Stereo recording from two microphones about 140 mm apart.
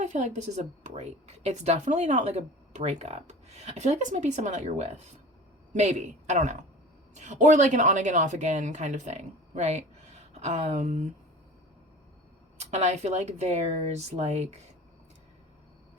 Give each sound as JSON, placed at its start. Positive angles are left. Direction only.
{"t": 0.0, "sound": "a woman's voice", "side_deg": -55}
{"t": 12.5, "sound": "a woman's voice", "side_deg": -50}